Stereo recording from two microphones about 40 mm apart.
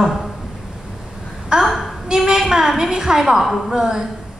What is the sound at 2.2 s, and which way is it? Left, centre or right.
A woman's voice, centre.